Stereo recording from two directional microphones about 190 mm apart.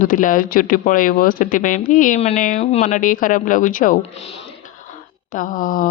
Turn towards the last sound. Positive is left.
turn(degrees=45)  # may be behind; listen again after turning